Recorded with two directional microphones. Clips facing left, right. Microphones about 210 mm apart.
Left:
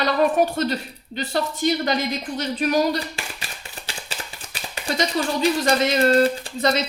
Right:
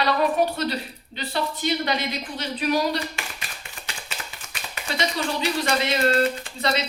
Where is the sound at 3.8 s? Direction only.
30° left (ahead or behind).